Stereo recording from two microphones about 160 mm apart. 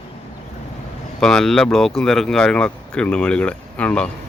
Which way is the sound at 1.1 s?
5° left (ahead or behind).